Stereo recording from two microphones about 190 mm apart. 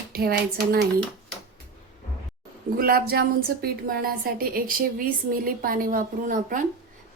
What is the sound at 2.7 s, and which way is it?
A woman's voice, 50° right (ahead or behind).